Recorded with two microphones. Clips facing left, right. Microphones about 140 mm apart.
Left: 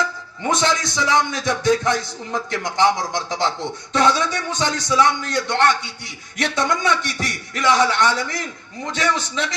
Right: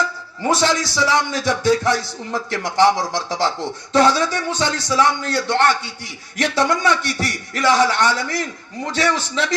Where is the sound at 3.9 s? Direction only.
35° right (ahead or behind).